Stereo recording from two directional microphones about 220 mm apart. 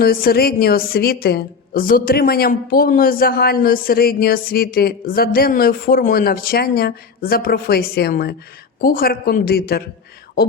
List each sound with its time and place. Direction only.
0.0 s a woman's voice: 45° left (ahead or behind)